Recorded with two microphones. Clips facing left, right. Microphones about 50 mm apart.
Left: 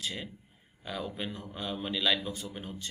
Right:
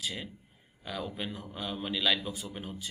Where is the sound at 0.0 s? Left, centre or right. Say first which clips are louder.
Even; centre.